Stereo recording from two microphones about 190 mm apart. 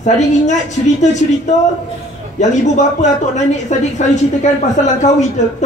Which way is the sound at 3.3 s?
40° left (ahead or behind).